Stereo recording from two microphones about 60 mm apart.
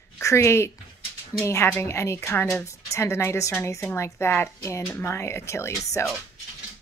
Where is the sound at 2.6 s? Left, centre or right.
Left.